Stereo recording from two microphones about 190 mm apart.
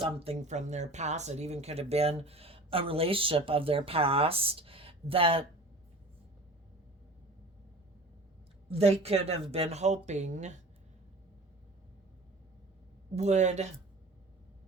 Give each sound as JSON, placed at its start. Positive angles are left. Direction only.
{"t": 0.0, "sound": "speech", "side_deg": -30}
{"t": 8.7, "sound": "speech", "side_deg": -30}
{"t": 13.1, "sound": "speech", "side_deg": -35}